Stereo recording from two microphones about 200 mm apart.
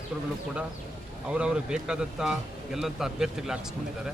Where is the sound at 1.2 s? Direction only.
5° right (ahead or behind).